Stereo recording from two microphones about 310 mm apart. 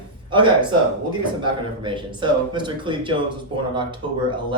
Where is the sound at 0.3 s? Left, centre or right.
Centre.